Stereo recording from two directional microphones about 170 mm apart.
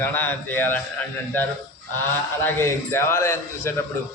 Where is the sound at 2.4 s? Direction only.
15° left (ahead or behind).